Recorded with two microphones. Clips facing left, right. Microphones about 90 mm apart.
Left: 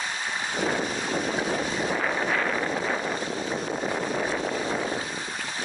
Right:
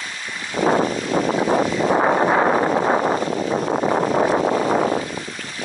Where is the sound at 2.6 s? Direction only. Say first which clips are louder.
Right 10 dB; 80° right.